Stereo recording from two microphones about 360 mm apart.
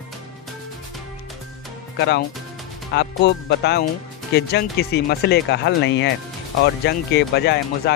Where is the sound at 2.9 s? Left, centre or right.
Left.